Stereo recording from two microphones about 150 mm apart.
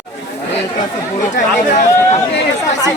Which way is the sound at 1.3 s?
55° left (ahead or behind).